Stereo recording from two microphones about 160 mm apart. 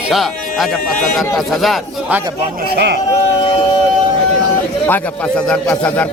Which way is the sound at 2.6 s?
85° right.